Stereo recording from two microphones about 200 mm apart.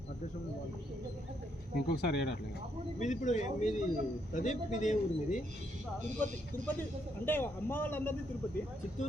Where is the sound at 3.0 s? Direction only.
40° left (ahead or behind).